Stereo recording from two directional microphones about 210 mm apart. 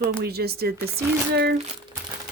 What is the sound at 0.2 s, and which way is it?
Speech, 50° right (ahead or behind).